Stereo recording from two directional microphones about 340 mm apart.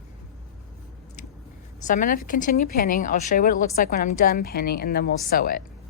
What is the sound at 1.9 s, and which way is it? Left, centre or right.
A woman's voice, left.